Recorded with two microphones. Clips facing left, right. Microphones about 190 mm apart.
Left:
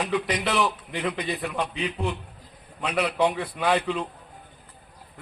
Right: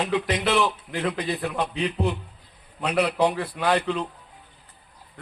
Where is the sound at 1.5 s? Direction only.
35° right (ahead or behind).